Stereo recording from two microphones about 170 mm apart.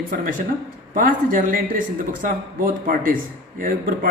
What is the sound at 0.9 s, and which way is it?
A man's voice, 55° right (ahead or behind).